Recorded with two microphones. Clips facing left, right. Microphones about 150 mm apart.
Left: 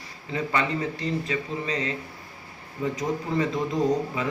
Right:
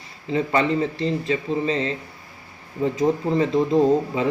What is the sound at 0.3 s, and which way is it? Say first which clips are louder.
Speech: right 6 dB; 30° right (ahead or behind).